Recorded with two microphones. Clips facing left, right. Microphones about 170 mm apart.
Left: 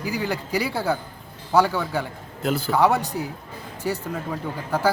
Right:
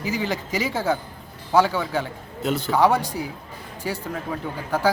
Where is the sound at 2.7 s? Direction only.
15° right (ahead or behind).